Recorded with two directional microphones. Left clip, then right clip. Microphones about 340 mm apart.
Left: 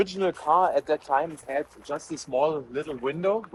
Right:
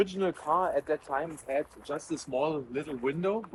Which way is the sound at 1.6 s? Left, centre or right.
Centre.